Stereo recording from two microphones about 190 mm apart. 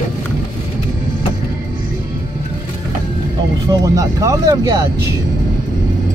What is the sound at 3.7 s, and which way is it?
Speech, 15° right (ahead or behind).